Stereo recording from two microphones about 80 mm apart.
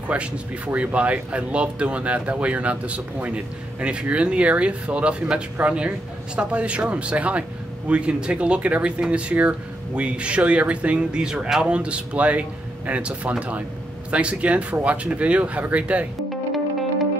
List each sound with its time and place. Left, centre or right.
0.7 s speech: centre